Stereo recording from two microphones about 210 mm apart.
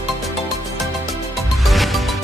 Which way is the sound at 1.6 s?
Centre (ahead or behind).